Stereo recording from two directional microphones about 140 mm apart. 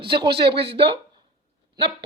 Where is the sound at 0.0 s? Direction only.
35° right (ahead or behind).